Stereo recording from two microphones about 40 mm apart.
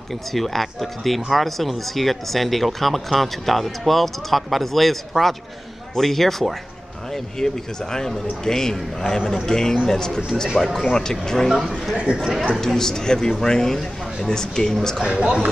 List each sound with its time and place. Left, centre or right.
0.3 s a man's voice: centre
11.4 s speech: centre
12.1 s a man's voice: right
12.5 s a man's voice: centre
15.0 s a man's voice: right